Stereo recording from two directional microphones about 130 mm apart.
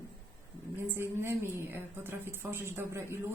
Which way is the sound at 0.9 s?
20° right (ahead or behind).